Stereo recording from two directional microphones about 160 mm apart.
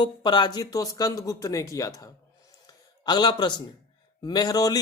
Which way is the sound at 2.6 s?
25° left (ahead or behind).